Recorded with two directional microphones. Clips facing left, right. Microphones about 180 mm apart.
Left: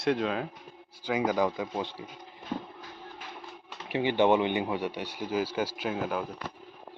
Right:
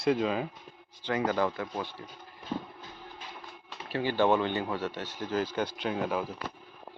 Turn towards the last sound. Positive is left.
turn(degrees=0)  # may be behind; listen again after turning